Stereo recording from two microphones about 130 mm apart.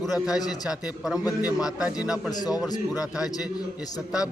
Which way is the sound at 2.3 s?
30° left (ahead or behind).